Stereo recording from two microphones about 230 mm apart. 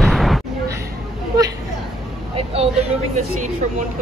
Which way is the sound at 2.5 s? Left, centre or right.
Right.